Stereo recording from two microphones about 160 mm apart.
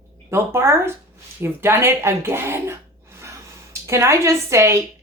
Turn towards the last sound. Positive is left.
turn(degrees=-15)  # may be behind; listen again after turning